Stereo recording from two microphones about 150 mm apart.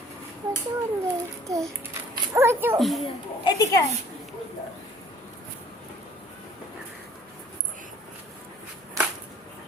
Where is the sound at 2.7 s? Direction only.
Centre (ahead or behind).